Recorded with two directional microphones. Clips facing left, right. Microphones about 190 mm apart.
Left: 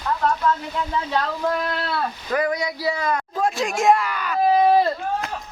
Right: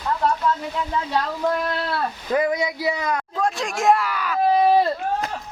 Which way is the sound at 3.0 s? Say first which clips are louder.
Left 1 dB; centre (ahead or behind).